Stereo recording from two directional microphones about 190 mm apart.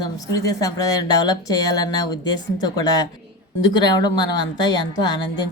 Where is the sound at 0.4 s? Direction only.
20° left (ahead or behind).